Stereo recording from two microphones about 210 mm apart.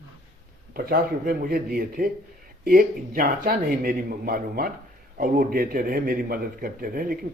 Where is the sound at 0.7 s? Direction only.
45° right (ahead or behind).